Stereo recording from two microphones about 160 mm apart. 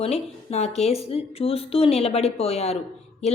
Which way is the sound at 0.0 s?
40° left (ahead or behind).